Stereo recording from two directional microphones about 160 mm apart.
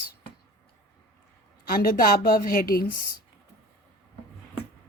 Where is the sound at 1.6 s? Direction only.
65° left (ahead or behind).